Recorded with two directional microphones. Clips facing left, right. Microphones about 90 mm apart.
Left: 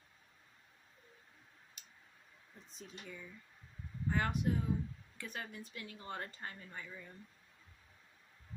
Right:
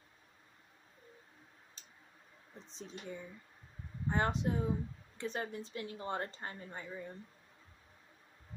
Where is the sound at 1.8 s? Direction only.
30° right (ahead or behind).